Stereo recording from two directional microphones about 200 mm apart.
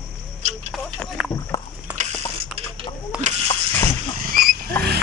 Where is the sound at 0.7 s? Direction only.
Centre (ahead or behind).